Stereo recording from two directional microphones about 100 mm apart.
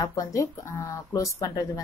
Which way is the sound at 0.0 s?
35° left (ahead or behind).